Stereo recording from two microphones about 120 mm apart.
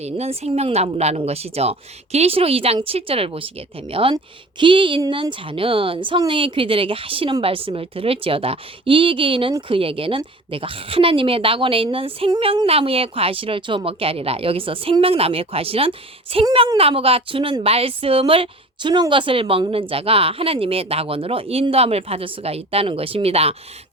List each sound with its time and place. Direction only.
0.0 s speech: 60° right (ahead or behind)